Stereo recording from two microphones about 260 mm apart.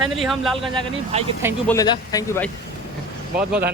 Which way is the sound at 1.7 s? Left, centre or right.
Centre.